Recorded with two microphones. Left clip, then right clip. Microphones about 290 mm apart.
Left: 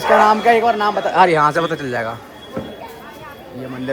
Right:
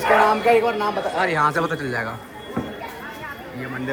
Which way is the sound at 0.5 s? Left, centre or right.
Left.